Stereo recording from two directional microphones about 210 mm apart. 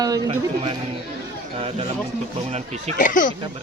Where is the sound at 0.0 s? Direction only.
15° right (ahead or behind).